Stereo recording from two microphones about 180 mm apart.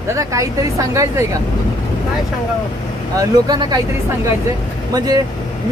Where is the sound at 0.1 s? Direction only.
15° right (ahead or behind).